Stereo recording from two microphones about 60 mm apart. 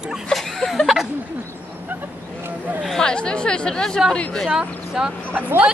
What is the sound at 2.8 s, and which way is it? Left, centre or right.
Speech, centre.